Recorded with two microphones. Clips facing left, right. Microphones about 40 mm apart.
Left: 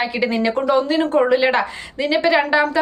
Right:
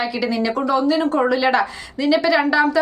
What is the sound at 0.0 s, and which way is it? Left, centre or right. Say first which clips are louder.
A woman's voice: left 2 dB; left.